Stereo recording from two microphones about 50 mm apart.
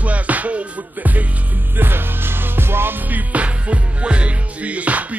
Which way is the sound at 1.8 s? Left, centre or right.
Right.